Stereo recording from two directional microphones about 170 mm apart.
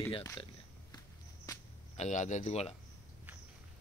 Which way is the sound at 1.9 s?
45° left (ahead or behind).